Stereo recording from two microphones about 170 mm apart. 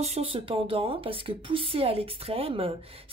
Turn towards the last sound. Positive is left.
turn(degrees=-35)  # may be behind; listen again after turning